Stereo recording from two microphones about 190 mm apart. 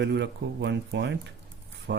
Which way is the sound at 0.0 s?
65° right (ahead or behind).